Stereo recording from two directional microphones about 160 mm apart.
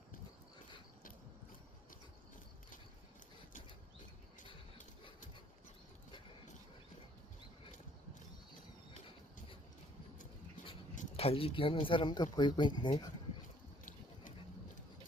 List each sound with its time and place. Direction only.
11.2 s speech: 35° left (ahead or behind)